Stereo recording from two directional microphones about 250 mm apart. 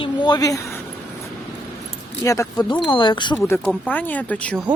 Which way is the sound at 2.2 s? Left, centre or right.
Centre.